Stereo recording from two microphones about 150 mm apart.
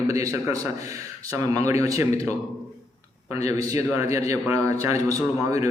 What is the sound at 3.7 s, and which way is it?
A man's voice, 20° right (ahead or behind).